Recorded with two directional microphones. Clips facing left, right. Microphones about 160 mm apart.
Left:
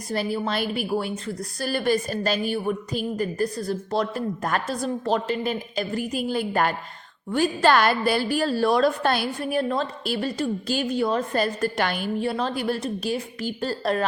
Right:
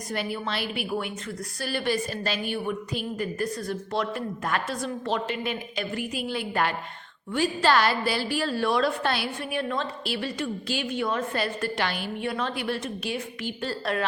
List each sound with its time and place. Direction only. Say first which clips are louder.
0.1 s a woman's voice: left 5 dB; 35° left (ahead or behind)